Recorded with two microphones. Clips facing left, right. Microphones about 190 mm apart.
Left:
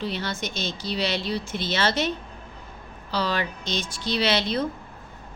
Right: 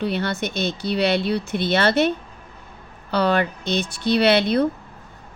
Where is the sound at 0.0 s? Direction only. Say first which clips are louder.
Right 6 dB; 60° right (ahead or behind).